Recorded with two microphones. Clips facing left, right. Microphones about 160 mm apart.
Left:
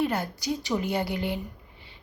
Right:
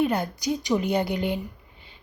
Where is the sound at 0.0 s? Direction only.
15° right (ahead or behind).